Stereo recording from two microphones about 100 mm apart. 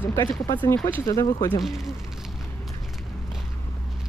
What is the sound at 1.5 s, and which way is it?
Speech, 5° right (ahead or behind).